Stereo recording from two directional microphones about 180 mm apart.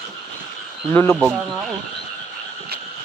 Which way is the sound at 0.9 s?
10° left (ahead or behind).